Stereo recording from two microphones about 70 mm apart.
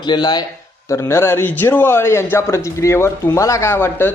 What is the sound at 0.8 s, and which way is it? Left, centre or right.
Speech, left.